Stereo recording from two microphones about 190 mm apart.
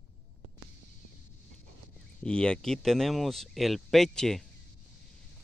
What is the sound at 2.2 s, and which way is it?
Speech, 5° left (ahead or behind).